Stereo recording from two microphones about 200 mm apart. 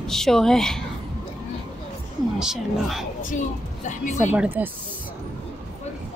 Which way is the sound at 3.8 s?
35° left (ahead or behind).